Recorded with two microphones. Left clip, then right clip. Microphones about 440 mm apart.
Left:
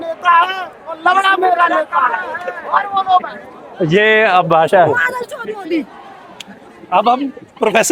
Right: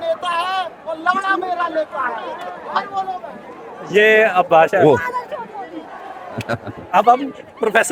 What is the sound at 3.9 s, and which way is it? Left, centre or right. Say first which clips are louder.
Speech: left 2 dB; left.